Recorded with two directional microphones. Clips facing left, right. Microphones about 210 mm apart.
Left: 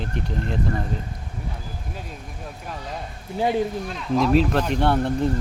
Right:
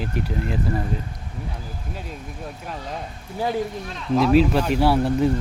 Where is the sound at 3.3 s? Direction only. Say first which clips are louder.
Left 2 dB; 20° left (ahead or behind).